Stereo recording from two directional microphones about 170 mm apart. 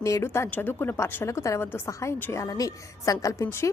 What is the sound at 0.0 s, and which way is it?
A woman's voice, 15° left (ahead or behind).